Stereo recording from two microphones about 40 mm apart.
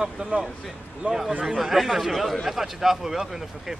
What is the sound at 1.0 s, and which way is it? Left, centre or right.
Speech, right.